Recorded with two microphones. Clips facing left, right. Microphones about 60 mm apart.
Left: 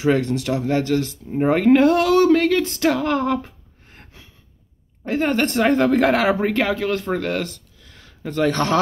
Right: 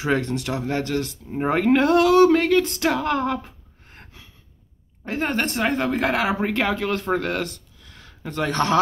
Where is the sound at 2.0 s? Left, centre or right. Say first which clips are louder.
Even; right.